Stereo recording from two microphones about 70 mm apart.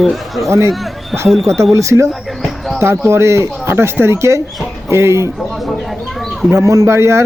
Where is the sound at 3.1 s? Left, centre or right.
Right.